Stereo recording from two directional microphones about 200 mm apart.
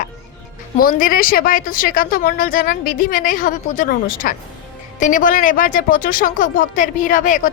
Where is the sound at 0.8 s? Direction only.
45° left (ahead or behind).